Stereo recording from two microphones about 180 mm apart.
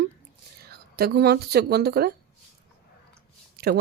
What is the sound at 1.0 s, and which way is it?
Speech, 60° right (ahead or behind).